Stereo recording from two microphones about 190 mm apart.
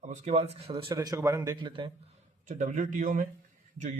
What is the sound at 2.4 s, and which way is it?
Speech, 40° right (ahead or behind).